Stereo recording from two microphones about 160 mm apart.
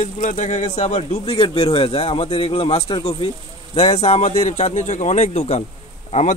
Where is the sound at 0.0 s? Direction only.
50° left (ahead or behind).